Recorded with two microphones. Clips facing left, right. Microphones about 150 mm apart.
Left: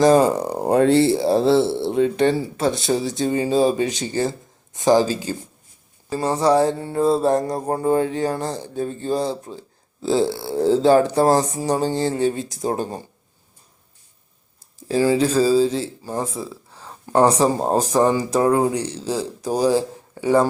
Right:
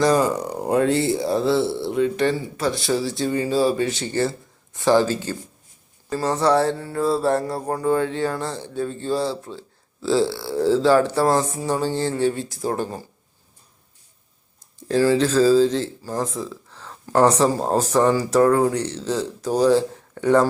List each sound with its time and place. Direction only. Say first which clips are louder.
0.0 s speech: left 4 dB; 30° left (ahead or behind)
8.5 s speech: left 1 dB; 45° left (ahead or behind)
8.8 s speech: left 1 dB; 20° left (ahead or behind)
14.8 s speech: even; 10° left (ahead or behind)